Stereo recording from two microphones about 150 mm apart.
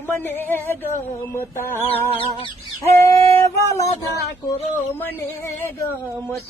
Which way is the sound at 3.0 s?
20° left (ahead or behind).